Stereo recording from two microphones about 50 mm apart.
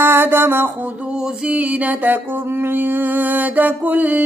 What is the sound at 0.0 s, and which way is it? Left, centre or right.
Music, right.